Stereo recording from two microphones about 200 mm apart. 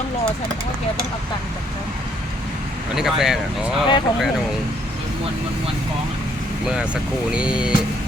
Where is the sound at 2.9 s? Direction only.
Centre (ahead or behind).